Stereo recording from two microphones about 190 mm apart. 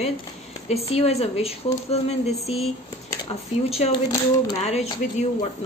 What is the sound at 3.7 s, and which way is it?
A woman's voice, 30° left (ahead or behind).